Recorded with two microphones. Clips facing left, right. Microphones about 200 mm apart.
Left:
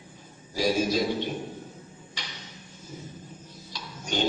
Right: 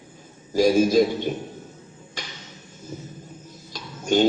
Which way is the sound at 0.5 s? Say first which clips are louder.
Right 8 dB; 45° right (ahead or behind).